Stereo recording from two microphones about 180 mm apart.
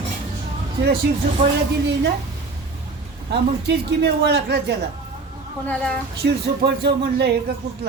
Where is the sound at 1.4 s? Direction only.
45° right (ahead or behind).